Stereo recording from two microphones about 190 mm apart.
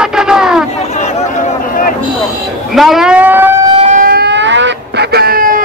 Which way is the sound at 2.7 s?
Centre (ahead or behind).